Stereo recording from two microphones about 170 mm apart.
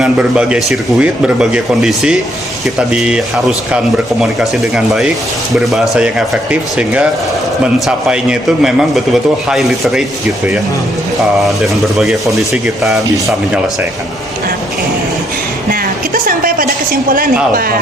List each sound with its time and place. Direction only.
0.0 s speech: 5° right (ahead or behind)
11.2 s speech: centre (ahead or behind)
15.7 s a woman's voice: 55° right (ahead or behind)